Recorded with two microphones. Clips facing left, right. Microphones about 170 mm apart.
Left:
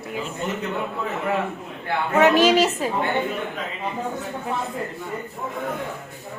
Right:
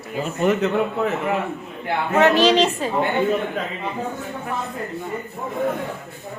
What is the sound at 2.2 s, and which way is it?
Speech, 10° left (ahead or behind).